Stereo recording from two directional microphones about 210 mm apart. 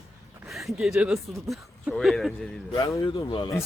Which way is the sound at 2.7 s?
25° left (ahead or behind).